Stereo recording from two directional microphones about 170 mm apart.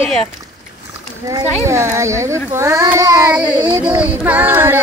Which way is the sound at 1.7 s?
15° right (ahead or behind).